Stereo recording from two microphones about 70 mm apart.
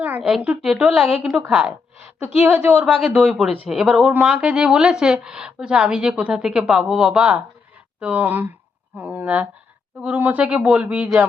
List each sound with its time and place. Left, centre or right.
0.2 s a woman's voice: centre
2.1 s a woman's voice: right